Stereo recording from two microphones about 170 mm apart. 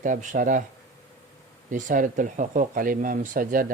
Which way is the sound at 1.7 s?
50° right (ahead or behind).